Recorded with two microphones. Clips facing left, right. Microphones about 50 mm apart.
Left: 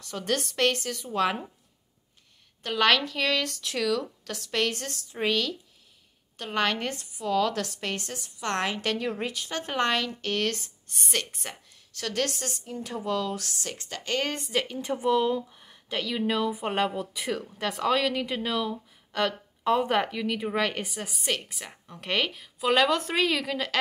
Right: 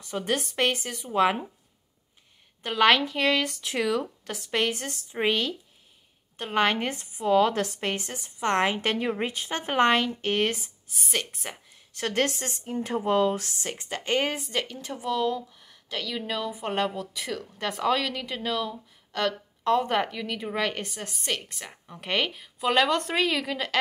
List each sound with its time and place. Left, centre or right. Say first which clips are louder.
0.0 s speech: right 1 dB; centre
2.6 s a woman's voice: right 2 dB; centre
10.6 s speech: even; centre
11.7 s a woman's voice: right 4 dB; right
14.3 s speech: left 1 dB; centre
15.0 s speech: left 2 dB; centre